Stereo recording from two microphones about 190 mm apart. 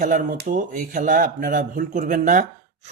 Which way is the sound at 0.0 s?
45° right (ahead or behind).